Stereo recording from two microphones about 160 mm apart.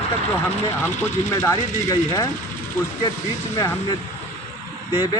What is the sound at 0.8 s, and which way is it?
Speech, 15° left (ahead or behind).